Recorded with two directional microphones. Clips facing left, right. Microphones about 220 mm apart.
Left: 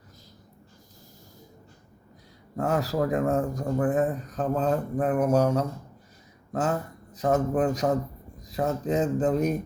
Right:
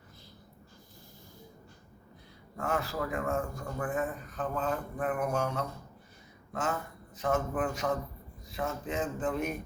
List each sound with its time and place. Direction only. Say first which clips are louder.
2.6 s a man's voice: left 7 dB; 40° left (ahead or behind)